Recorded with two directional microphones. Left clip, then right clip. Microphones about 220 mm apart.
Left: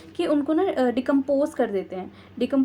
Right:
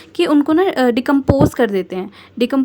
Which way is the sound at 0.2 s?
45° right (ahead or behind).